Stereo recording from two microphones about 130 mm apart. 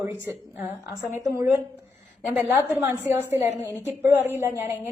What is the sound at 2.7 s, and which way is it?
A woman's voice, 15° right (ahead or behind).